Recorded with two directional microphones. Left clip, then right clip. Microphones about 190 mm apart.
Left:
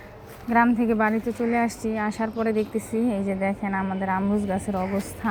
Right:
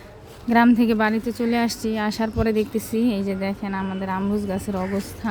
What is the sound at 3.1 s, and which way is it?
Speech, 35° right (ahead or behind).